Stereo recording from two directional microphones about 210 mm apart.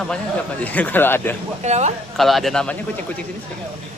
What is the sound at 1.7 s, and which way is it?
Speech, 35° right (ahead or behind).